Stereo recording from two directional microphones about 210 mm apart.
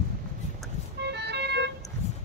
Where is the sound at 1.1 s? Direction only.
55° right (ahead or behind).